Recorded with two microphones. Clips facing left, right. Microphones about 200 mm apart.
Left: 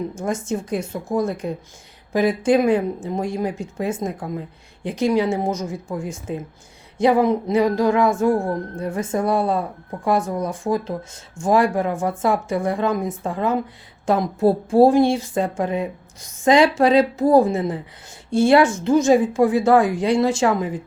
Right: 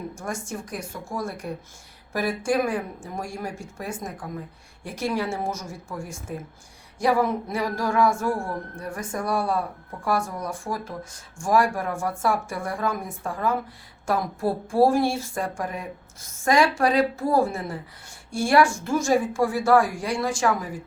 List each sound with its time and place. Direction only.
0.1 s a woman's voice: 20° left (ahead or behind)